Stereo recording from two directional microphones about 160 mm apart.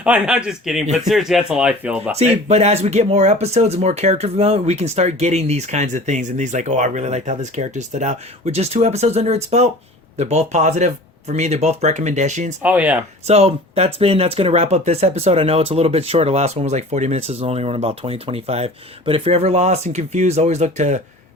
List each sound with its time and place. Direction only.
0.0 s speech: 5° right (ahead or behind)
2.1 s speech: 40° right (ahead or behind)
12.6 s speech: 10° right (ahead or behind)
13.2 s speech: 40° right (ahead or behind)